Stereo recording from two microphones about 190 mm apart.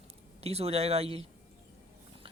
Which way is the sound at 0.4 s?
30° right (ahead or behind).